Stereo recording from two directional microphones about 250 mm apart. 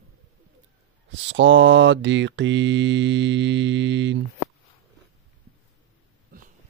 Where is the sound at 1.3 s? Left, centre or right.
Right.